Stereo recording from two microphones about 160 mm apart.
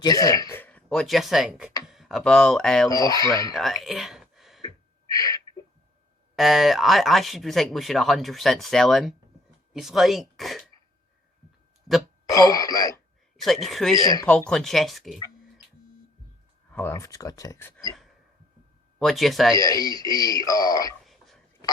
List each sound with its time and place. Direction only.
0.0 s speech: 20° left (ahead or behind); by 2.9 s 5° left (ahead or behind)
2.9 s speech: 20° left (ahead or behind)
3.5 s a sound: centre (ahead or behind)
5.1 s a sound: 20° left (ahead or behind)
6.3 s speech: centre (ahead or behind)
12.3 s speech: 20° left (ahead or behind)
13.3 s speech: centre (ahead or behind)
13.9 s speech: 25° left (ahead or behind)
14.5 s speech: centre (ahead or behind)
16.7 s speech: 15° left (ahead or behind)
18.9 s speech: centre (ahead or behind)
19.5 s speech: 20° left (ahead or behind)
21.0 s whispering: centre (ahead or behind)